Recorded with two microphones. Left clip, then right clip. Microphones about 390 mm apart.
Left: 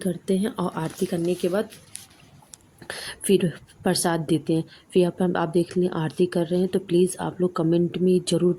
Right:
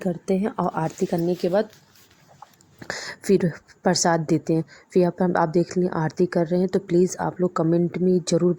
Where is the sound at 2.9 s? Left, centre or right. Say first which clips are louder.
Right 3 dB; left.